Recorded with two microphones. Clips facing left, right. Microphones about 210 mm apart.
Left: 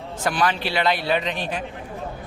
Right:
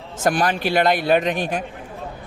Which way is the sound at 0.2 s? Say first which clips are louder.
Right 3 dB; 45° right (ahead or behind).